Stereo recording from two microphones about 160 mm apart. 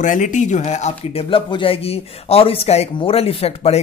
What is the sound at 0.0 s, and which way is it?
Speech, 50° left (ahead or behind).